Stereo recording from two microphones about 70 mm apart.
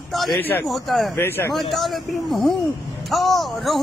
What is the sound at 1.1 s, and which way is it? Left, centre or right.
Speech, left.